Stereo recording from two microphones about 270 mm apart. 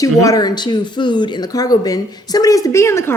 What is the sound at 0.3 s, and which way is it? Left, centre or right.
Speech, centre.